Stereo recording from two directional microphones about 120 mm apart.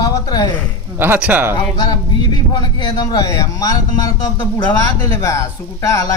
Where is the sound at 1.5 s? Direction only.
35° left (ahead or behind).